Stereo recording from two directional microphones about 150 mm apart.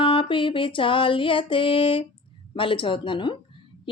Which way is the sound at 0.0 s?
35° left (ahead or behind).